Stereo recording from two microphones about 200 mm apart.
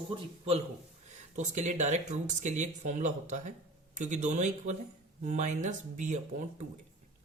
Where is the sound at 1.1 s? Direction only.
35° right (ahead or behind).